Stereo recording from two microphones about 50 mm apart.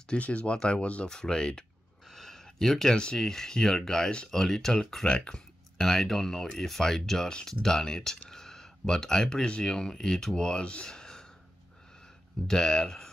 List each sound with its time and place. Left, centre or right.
0.2 s speech: left; by 4.1 s centre
4.1 s speech: centre
4.4 s speech: centre
5.9 s speech: centre
12.4 s speech: centre